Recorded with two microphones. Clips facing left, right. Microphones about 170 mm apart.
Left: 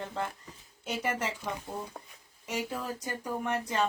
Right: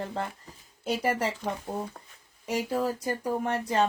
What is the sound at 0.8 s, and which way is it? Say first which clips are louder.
Speech: right 5 dB; 35° right (ahead or behind).